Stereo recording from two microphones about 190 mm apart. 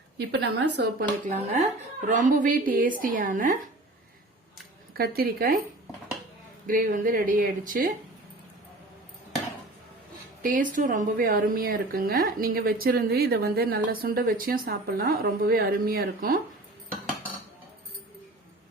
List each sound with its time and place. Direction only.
0.3 s speech: 55° right (ahead or behind)
1.2 s a woman's voice: 40° right (ahead or behind)
4.9 s a woman's voice: 55° right (ahead or behind)
6.7 s a woman's voice: 45° right (ahead or behind)
10.4 s a woman's voice: 45° right (ahead or behind)